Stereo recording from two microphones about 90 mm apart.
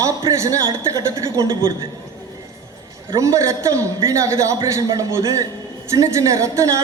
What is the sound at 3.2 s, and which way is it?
A woman's voice, 35° right (ahead or behind).